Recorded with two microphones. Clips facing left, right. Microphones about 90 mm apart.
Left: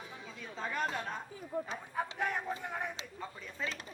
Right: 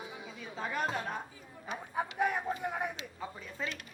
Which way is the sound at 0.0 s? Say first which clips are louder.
Right 2 dB; 10° right (ahead or behind).